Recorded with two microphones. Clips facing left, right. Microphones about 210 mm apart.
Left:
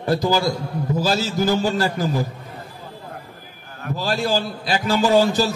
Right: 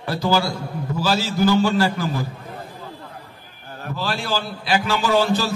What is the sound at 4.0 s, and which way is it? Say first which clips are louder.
A man's voice: left 4 dB; 45° left (ahead or behind).